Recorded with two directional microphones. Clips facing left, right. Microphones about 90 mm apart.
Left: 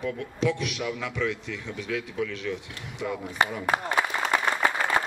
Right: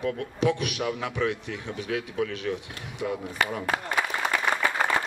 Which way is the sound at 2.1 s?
50° right (ahead or behind).